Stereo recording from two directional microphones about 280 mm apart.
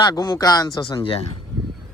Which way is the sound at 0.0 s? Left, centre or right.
Centre.